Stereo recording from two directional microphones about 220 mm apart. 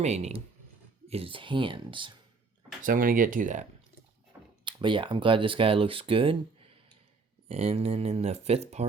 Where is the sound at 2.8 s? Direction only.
40° right (ahead or behind).